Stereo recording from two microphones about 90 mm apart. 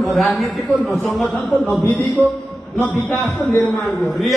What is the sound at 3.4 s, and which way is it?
Speech, 30° left (ahead or behind).